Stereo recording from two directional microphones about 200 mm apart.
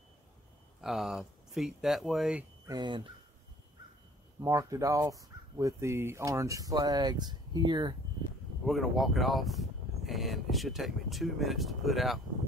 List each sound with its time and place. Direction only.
0.7 s speech: centre (ahead or behind)
2.7 s speech: 20° right (ahead or behind)
4.4 s speech: 15° right (ahead or behind)
8.6 s speech: centre (ahead or behind)